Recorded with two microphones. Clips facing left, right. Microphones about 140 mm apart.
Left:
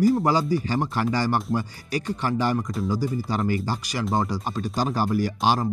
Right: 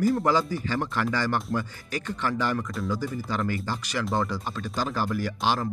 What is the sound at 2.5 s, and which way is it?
Speech, 35° left (ahead or behind).